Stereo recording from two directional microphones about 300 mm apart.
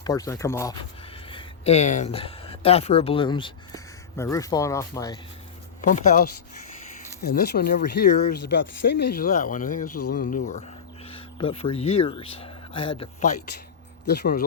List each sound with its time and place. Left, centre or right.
0.0 s speech: centre
5.9 s speech: left
9.9 s speech: left
10.2 s speech: left
14.0 s speech: left